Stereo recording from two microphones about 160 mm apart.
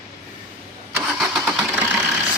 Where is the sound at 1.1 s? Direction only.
5° right (ahead or behind).